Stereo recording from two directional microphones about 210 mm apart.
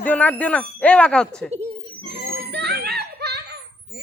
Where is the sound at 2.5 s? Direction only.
50° right (ahead or behind).